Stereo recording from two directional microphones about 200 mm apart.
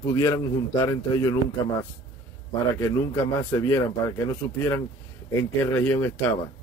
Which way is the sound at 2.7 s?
15° left (ahead or behind).